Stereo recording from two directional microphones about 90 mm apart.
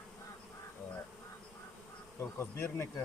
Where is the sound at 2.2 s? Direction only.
25° left (ahead or behind).